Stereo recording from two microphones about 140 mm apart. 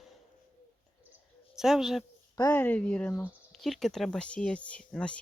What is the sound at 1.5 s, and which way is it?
Speech, 5° right (ahead or behind).